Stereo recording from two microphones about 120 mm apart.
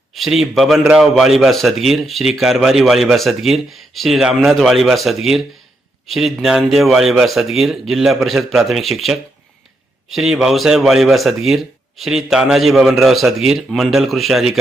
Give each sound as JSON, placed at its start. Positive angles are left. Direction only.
{"t": 0.1, "sound": "speech", "side_deg": 0}